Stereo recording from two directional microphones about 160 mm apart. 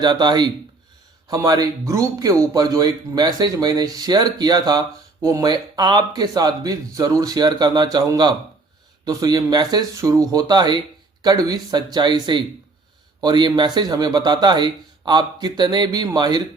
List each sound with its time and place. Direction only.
0.0 s speech: 25° right (ahead or behind)